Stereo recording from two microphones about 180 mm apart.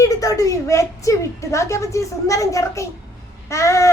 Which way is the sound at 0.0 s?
20° left (ahead or behind).